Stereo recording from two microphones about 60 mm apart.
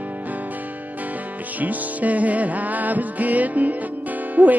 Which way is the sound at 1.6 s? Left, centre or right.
Right.